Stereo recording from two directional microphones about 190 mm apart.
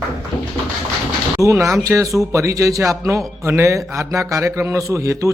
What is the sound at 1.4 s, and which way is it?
A man's voice, 15° right (ahead or behind).